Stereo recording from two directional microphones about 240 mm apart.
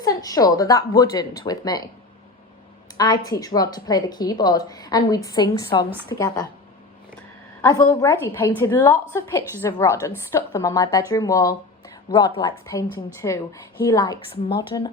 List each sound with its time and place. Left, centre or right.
0.0 s a woman's voice: centre
3.0 s a woman's voice: centre
7.6 s a woman's voice: centre